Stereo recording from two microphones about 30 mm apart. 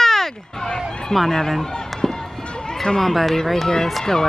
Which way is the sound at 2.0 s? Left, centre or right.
Centre.